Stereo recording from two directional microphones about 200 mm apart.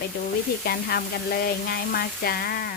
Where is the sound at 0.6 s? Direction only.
50° left (ahead or behind).